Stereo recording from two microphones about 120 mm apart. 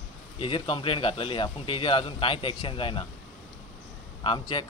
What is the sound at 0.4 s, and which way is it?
A man's voice, 45° left (ahead or behind).